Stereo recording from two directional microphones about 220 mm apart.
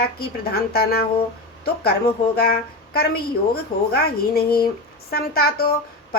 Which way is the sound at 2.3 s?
45° left (ahead or behind).